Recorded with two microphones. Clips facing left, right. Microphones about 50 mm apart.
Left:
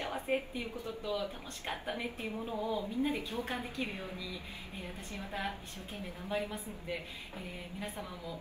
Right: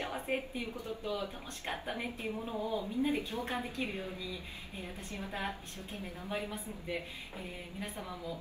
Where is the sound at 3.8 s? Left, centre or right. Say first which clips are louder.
Right 1 dB; left.